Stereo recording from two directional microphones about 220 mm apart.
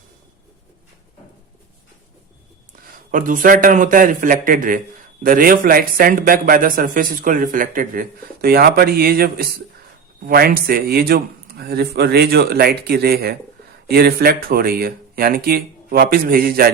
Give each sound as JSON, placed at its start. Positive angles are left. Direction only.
{"t": 3.1, "sound": "a man's voice", "side_deg": -35}